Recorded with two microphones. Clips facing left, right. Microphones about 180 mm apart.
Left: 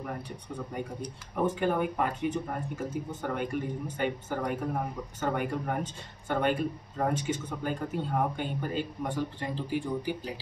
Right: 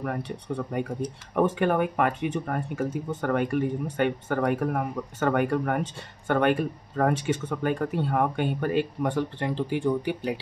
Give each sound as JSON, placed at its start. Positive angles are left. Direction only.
{"t": 0.7, "sound": "speech", "side_deg": -70}
{"t": 1.3, "sound": "speech", "side_deg": -85}